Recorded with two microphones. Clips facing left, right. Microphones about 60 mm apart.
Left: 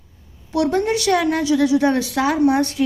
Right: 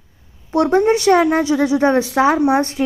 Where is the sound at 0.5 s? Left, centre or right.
Right.